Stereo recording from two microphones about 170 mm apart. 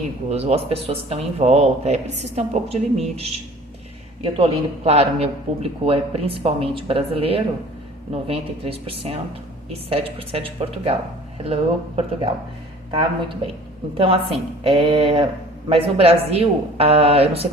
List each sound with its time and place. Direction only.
0.3 s speech: 40° right (ahead or behind)